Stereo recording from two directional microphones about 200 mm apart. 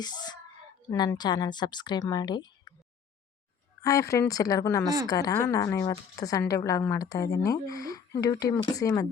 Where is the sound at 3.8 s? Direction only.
15° left (ahead or behind).